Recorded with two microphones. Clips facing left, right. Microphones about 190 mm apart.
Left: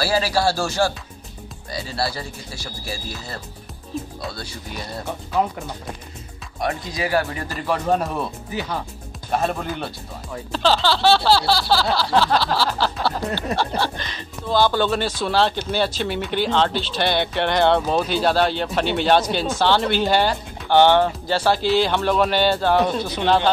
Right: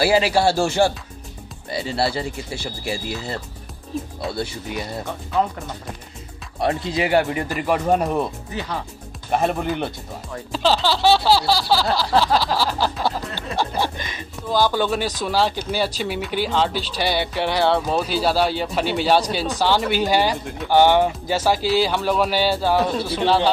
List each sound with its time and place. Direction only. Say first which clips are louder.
0.0 s speech: right 3 dB; 20° right (ahead or behind)
5.0 s speech: left 1 dB; 5° left (ahead or behind)
6.6 s speech: right 4 dB; 30° right (ahead or behind)
8.5 s speech: left 2 dB; centre (ahead or behind)
9.3 s speech: right 2 dB; 15° right (ahead or behind)
10.5 s speech: even; 5° right (ahead or behind)